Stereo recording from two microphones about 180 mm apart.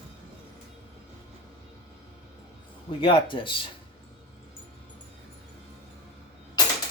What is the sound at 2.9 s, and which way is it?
Speech, 30° left (ahead or behind).